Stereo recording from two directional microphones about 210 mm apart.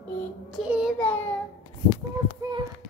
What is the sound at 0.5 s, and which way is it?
Speech, 5° right (ahead or behind).